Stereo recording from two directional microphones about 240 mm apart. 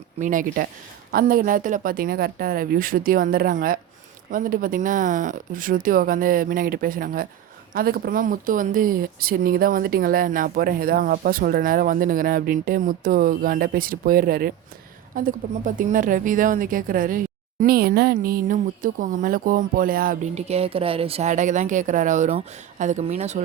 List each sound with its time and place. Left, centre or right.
0.2 s a woman's voice: right